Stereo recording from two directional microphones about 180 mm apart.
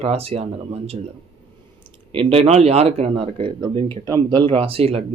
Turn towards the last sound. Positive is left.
turn(degrees=-30)  # may be behind; listen again after turning